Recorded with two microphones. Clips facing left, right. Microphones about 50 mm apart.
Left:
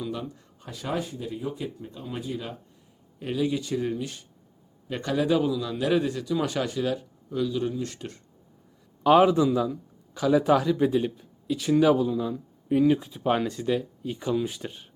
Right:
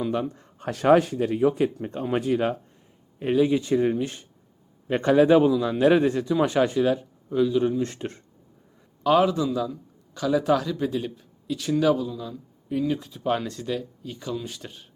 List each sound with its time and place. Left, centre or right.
0.0 s speech: right
0.6 s speech: right
3.2 s a man's voice: right
9.0 s speech: centre
12.0 s speech: left